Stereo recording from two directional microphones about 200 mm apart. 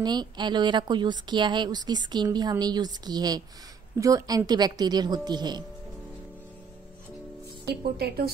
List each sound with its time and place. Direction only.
0.0 s a woman's voice: 20° right (ahead or behind)
7.6 s speech: 50° right (ahead or behind)